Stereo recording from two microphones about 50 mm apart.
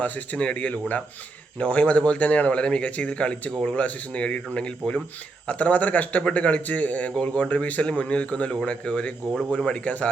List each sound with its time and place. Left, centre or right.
0.0 s speech: left